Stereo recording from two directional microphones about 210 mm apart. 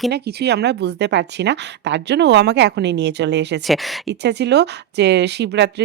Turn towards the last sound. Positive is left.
turn(degrees=-55)  # may be behind; listen again after turning